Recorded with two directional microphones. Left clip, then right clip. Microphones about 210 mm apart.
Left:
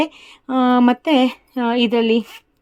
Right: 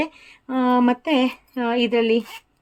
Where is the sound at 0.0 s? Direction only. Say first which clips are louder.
Left 5 dB; 35° left (ahead or behind).